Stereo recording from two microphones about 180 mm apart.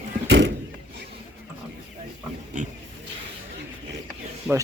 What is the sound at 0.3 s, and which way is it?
Vehicle, 80° right.